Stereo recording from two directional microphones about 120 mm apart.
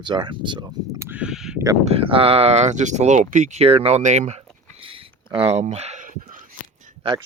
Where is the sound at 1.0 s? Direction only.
10° right (ahead or behind).